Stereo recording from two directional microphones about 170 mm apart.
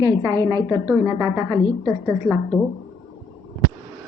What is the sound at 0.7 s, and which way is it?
Speech, 5° right (ahead or behind).